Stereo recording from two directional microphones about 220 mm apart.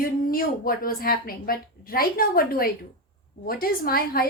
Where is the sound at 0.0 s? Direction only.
40° left (ahead or behind).